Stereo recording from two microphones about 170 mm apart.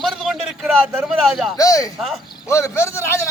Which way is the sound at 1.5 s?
20° left (ahead or behind).